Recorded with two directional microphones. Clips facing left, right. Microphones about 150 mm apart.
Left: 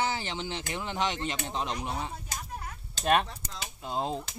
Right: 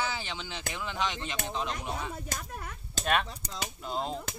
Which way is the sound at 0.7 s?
35° left (ahead or behind).